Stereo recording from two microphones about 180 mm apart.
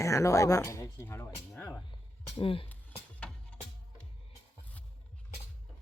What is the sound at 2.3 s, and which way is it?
Speech, 30° left (ahead or behind).